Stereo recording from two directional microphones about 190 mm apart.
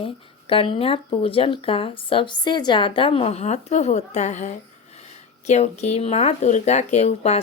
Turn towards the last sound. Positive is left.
turn(degrees=35)  # may be behind; listen again after turning